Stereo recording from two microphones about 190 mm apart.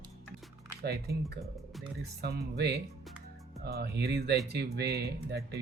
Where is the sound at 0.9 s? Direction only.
60° right (ahead or behind).